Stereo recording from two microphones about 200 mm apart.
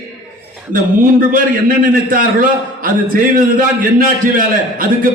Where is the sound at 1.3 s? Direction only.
45° right (ahead or behind).